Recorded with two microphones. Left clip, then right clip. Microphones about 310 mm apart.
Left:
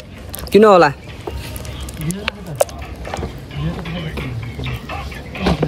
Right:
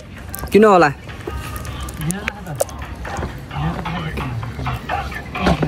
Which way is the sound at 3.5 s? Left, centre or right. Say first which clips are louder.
Right 5 dB; centre.